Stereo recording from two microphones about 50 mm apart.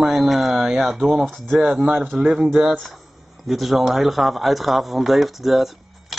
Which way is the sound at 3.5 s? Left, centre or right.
Centre.